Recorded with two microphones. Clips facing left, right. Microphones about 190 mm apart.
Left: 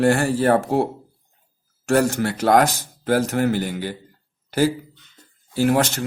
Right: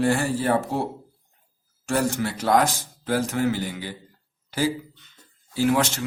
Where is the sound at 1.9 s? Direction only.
75° left (ahead or behind).